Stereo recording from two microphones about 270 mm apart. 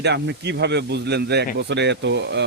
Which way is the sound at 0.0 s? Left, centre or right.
Right.